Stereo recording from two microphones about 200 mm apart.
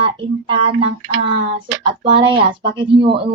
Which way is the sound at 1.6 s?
25° right (ahead or behind).